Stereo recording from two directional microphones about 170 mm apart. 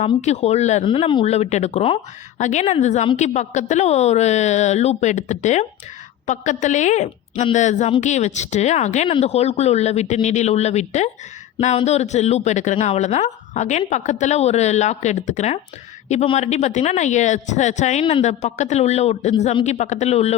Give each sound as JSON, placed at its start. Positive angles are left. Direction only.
{"t": 0.0, "sound": "speech", "side_deg": 40}
{"t": 0.9, "sound": "speech", "side_deg": 30}